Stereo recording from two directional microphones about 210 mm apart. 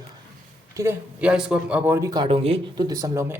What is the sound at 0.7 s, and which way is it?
Speech, 10° right (ahead or behind).